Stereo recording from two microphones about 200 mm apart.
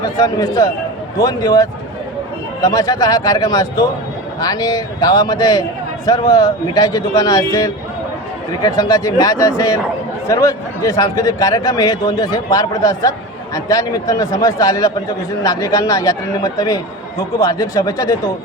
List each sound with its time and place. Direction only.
0.0 s a man's voice: 20° left (ahead or behind)